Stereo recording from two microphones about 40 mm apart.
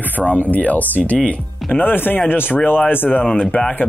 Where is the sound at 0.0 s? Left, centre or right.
Left.